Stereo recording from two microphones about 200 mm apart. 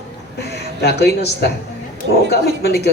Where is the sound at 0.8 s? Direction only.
55° left (ahead or behind).